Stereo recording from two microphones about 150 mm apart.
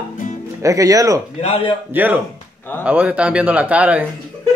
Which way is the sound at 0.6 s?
20° right (ahead or behind).